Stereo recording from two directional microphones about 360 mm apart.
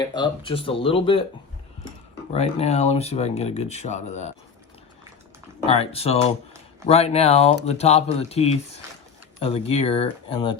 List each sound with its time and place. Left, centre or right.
0.0 s speech: centre
2.3 s speech: centre
5.6 s speech: centre